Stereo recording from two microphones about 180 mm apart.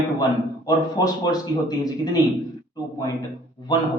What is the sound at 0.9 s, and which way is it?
Speech, 20° left (ahead or behind).